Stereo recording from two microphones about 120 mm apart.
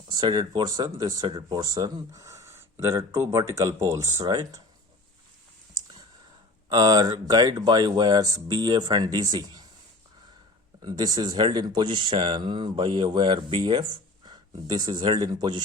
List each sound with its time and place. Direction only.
0.1 s speech: 35° right (ahead or behind)
6.7 s speech: 35° right (ahead or behind)
10.8 s speech: 35° right (ahead or behind)